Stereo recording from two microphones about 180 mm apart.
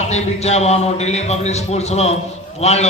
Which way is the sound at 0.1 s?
35° left (ahead or behind).